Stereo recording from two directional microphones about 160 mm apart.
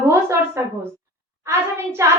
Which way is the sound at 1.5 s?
15° right (ahead or behind).